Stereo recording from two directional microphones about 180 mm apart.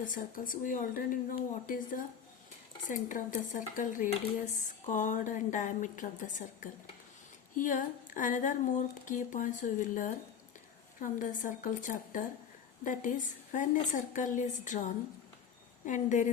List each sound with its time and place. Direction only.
0.0 s speech: 50° left (ahead or behind)
15.9 s speech: 45° left (ahead or behind)